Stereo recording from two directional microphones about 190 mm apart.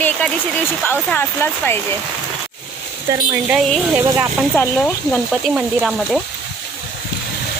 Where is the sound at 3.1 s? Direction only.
20° right (ahead or behind).